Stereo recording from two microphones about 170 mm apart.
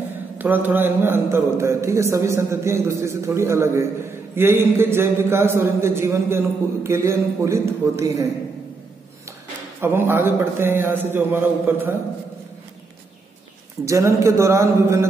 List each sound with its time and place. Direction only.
0.4 s a man's voice: 10° right (ahead or behind)
9.8 s a man's voice: 15° right (ahead or behind)
13.8 s a man's voice: 20° right (ahead or behind)